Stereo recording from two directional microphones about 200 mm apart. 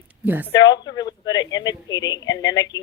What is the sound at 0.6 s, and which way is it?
Speech, 60° left (ahead or behind).